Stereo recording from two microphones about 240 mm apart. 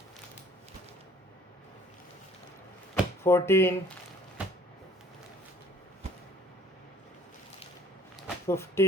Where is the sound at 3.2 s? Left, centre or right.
Centre.